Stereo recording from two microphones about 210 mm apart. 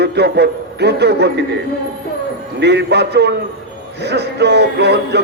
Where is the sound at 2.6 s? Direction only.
55° right (ahead or behind).